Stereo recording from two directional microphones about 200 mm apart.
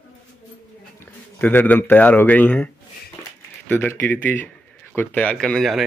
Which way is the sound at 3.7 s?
10° left (ahead or behind).